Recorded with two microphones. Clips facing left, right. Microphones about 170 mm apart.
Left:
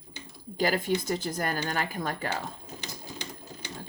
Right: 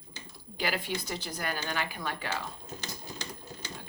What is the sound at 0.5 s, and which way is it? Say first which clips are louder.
Speech: left 6 dB; 45° left (ahead or behind).